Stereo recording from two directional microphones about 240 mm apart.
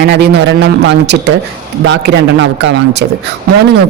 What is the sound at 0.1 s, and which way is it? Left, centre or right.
A man's voice, right.